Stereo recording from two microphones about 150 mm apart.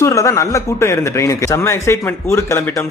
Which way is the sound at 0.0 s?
20° left (ahead or behind).